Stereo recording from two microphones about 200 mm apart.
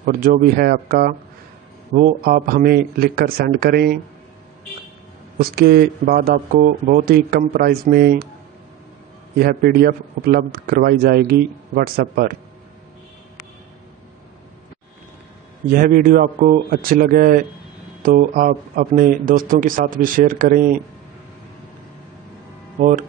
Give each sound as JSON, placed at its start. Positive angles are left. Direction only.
{"t": 0.0, "sound": "a man's voice", "side_deg": -45}
{"t": 5.4, "sound": "a man's voice", "side_deg": -50}
{"t": 9.4, "sound": "a man's voice", "side_deg": -50}
{"t": 15.7, "sound": "a man's voice", "side_deg": -45}
{"t": 22.8, "sound": "speech", "side_deg": -40}